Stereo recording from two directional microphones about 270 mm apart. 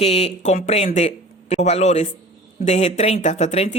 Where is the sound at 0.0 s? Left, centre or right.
Left.